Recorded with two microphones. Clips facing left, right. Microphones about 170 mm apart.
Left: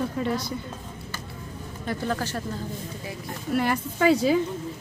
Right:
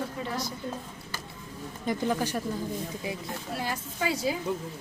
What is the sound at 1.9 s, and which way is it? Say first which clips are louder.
Speech: right 1 dB; 15° right (ahead or behind).